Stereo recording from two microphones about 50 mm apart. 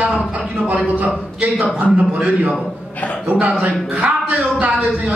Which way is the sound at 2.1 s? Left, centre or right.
Right.